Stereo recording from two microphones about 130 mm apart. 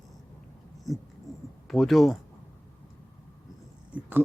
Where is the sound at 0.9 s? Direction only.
Centre (ahead or behind).